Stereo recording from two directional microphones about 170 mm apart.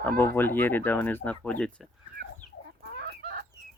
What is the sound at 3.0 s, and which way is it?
Chicken, 75° right (ahead or behind).